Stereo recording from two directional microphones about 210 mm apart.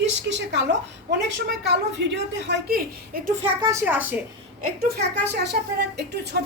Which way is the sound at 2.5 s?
45° right (ahead or behind).